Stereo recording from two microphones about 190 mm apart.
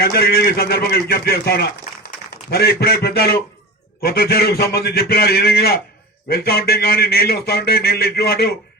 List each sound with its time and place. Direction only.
0.0 s a man's voice: 55° left (ahead or behind)